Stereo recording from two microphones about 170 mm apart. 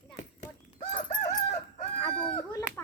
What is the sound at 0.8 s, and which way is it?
Fowl, 40° left (ahead or behind).